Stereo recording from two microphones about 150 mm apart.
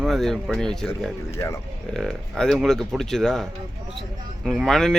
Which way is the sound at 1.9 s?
5° left (ahead or behind).